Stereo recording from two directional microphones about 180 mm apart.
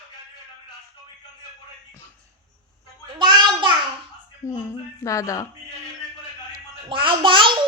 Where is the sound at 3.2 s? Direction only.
25° right (ahead or behind).